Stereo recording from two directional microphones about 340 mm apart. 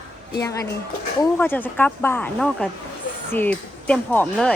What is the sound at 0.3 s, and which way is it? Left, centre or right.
A woman's voice, centre.